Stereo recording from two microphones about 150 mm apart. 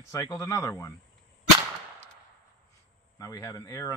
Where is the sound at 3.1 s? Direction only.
25° left (ahead or behind).